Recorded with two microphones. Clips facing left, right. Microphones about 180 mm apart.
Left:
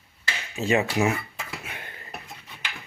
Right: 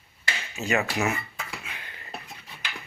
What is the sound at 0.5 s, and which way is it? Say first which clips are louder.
Speech: left 4 dB; 30° left (ahead or behind).